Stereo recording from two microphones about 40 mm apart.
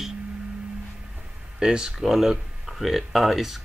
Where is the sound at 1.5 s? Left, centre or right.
Centre.